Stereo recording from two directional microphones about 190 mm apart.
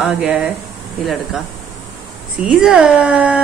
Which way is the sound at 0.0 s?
5° right (ahead or behind).